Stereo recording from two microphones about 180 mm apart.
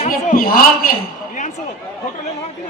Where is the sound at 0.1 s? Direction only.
50° left (ahead or behind).